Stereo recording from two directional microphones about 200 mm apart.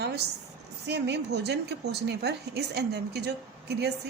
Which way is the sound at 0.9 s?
60° right (ahead or behind).